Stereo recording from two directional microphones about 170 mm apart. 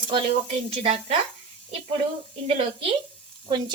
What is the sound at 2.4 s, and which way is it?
Speech, 35° right (ahead or behind).